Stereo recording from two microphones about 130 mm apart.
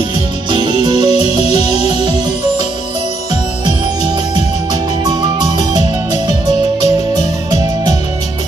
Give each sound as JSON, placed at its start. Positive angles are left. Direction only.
{"t": 0.5, "sound": "music", "side_deg": -40}
{"t": 5.6, "sound": "music", "side_deg": -30}